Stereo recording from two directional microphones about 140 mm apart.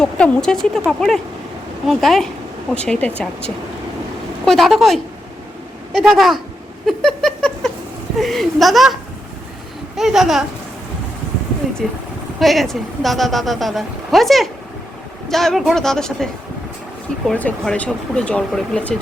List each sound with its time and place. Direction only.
0.0 s speech: 5° left (ahead or behind)
4.4 s speech: centre (ahead or behind)
6.8 s cat: 5° left (ahead or behind)
8.2 s speech: centre (ahead or behind)
10.0 s speech: centre (ahead or behind)
12.4 s speech: centre (ahead or behind)